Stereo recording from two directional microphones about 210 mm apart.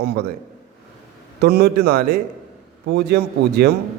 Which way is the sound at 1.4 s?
50° right (ahead or behind).